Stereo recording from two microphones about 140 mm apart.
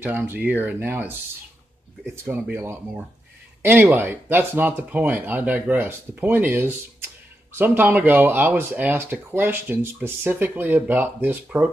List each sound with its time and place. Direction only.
0.0 s speech: 10° right (ahead or behind)
2.2 s speech: 15° right (ahead or behind)